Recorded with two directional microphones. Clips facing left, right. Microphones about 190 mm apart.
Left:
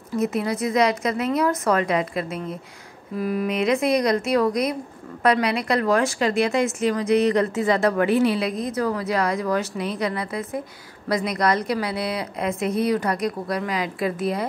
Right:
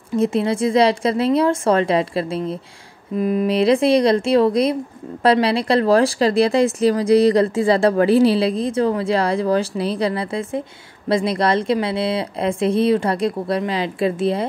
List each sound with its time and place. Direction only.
0.1 s speech: 30° right (ahead or behind)